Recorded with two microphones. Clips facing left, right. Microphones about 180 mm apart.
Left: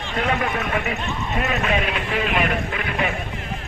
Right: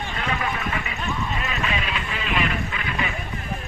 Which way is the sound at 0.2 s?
55° left (ahead or behind).